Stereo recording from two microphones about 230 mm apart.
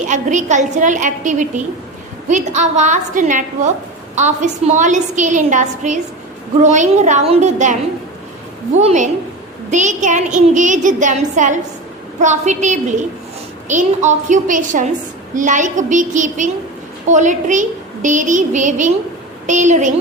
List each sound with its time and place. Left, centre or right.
0.1 s a woman's voice: right
8.8 s a woman's voice: right